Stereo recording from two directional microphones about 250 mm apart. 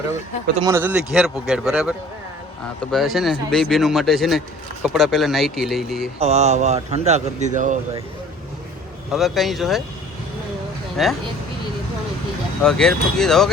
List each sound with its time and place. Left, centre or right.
0.5 s speech: centre
6.1 s speech: right
9.1 s speech: centre
11.0 s speech: centre
12.6 s speech: centre